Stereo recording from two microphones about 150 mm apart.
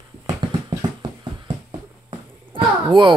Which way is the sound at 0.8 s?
30° right (ahead or behind).